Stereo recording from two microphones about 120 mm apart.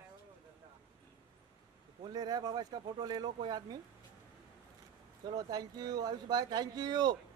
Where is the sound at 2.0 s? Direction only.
35° right (ahead or behind).